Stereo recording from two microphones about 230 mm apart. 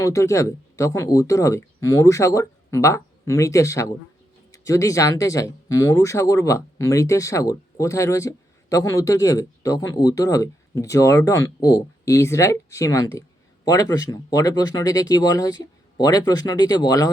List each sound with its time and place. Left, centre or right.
0.0 s speech: centre